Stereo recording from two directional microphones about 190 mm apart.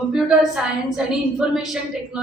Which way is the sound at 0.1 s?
5° right (ahead or behind).